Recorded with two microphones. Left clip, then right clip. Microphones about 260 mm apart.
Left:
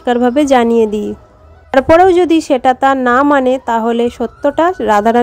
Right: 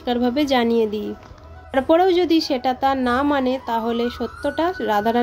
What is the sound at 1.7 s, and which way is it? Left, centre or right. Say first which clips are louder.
Speech: left 9 dB; left.